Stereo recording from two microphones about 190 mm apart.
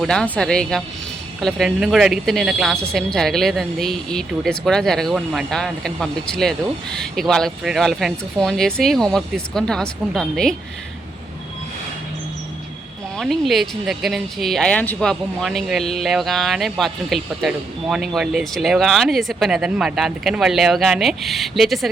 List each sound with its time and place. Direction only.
0.0 s speech: 5° left (ahead or behind)
13.1 s speech: centre (ahead or behind)